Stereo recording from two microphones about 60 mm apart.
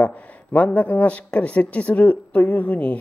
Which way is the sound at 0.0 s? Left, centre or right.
Left.